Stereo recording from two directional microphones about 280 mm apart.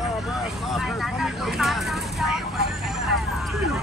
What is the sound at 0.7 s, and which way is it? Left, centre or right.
Speech, centre.